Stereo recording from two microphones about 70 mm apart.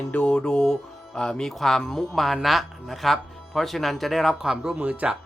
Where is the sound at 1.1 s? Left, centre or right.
Centre.